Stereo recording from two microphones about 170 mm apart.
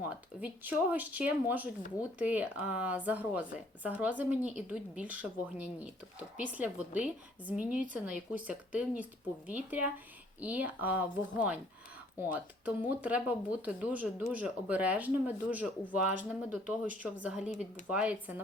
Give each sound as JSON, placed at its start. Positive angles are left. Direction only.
{"t": 0.4, "sound": "a woman's voice", "side_deg": -10}
{"t": 17.5, "sound": "speech", "side_deg": 45}
{"t": 17.8, "sound": "a woman's voice", "side_deg": -5}